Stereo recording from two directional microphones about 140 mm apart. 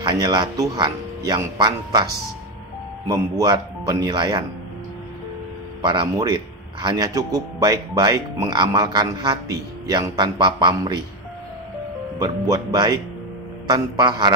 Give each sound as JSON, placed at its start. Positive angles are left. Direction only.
{"t": 0.0, "sound": "speech", "side_deg": -35}
{"t": 3.1, "sound": "speech", "side_deg": -30}
{"t": 5.8, "sound": "speech", "side_deg": -35}
{"t": 12.2, "sound": "speech", "side_deg": -30}